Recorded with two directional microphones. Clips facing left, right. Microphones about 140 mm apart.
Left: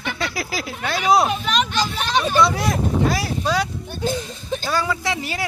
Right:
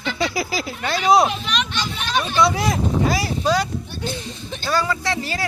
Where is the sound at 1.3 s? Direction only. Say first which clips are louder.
Left 4 dB; 45° left (ahead or behind).